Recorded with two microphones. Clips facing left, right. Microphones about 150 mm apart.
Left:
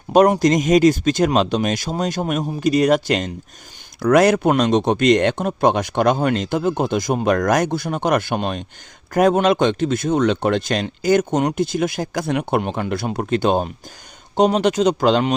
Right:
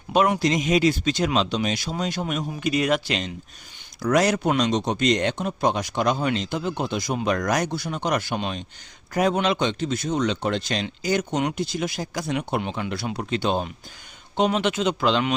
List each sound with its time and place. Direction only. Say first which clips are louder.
0.1 s speech: left 7 dB; 45° left (ahead or behind)
4.0 s speech: left 6 dB; 55° left (ahead or behind); by 15.4 s 40° left (ahead or behind)